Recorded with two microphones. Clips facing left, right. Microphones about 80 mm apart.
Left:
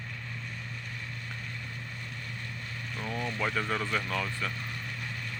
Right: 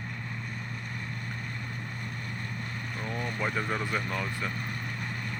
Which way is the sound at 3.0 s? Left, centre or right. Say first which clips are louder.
Left 1 dB; right.